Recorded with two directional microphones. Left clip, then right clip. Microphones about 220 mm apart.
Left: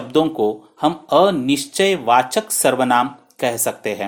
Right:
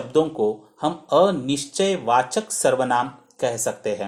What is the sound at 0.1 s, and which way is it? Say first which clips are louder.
Speech: left 3 dB; 30° left (ahead or behind).